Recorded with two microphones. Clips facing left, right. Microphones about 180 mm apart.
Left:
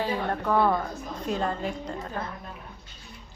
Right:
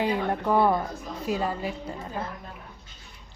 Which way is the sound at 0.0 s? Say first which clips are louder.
Right 2 dB; 15° right (ahead or behind).